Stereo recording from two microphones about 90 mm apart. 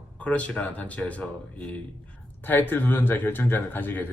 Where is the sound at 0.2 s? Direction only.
15° left (ahead or behind).